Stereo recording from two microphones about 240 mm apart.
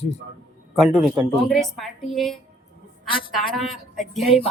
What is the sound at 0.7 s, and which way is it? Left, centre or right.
A woman's voice, centre.